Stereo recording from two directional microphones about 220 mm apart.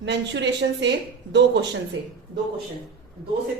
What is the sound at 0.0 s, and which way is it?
Speech, 55° right (ahead or behind).